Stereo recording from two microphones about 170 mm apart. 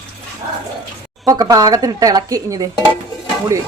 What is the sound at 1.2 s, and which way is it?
A woman's voice, 20° right (ahead or behind).